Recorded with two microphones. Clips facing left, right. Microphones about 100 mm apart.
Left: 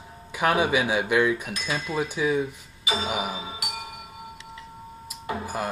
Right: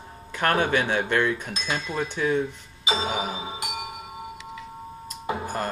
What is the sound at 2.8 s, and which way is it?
Music, 25° right (ahead or behind).